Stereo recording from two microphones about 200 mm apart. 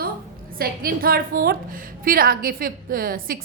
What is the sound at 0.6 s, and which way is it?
A woman's voice, 45° right (ahead or behind).